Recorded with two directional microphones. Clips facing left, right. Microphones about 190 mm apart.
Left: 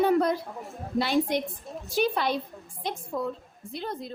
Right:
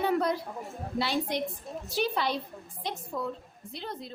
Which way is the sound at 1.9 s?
50° left (ahead or behind).